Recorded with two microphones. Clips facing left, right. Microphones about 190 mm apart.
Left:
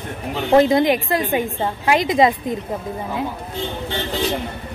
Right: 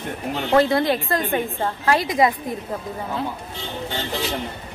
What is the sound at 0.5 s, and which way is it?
A woman's voice, 20° left (ahead or behind).